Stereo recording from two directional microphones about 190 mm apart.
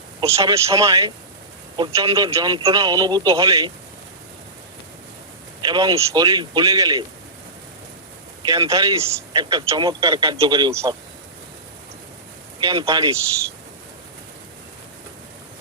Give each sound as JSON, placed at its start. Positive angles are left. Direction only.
{"t": 0.3, "sound": "speech", "side_deg": -15}
{"t": 5.6, "sound": "speech", "side_deg": -20}
{"t": 8.4, "sound": "speech", "side_deg": -20}
{"t": 12.6, "sound": "speech", "side_deg": -20}